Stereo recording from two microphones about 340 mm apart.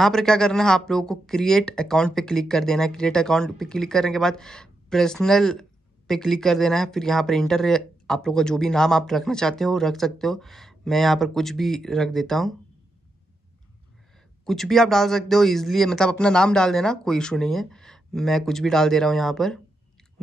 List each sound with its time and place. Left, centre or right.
0.0 s speech: centre
14.4 s speech: centre